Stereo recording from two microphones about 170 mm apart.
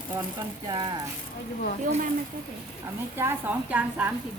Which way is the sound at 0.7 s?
25° right (ahead or behind).